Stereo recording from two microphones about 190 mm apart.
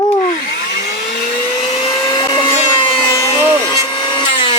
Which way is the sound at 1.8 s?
20° left (ahead or behind).